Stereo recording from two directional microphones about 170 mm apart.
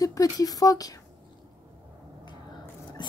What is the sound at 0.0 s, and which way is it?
Speech, 20° left (ahead or behind).